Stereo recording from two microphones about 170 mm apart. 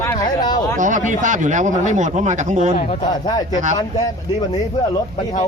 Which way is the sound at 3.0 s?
25° left (ahead or behind).